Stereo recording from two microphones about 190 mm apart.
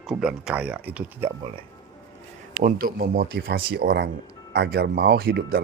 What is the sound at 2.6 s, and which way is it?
A man's voice, 50° right (ahead or behind).